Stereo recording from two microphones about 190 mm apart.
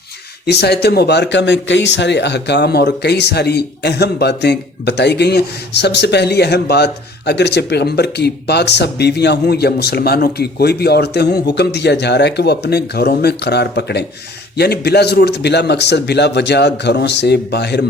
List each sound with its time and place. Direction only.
0.4 s speech: 60° left (ahead or behind)